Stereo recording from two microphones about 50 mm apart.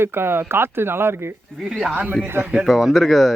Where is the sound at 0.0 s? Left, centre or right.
Right.